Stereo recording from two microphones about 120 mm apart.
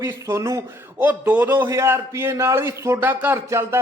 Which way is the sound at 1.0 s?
15° right (ahead or behind).